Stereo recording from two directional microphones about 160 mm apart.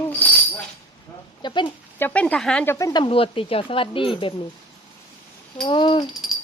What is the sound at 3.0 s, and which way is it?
Speech, 35° left (ahead or behind).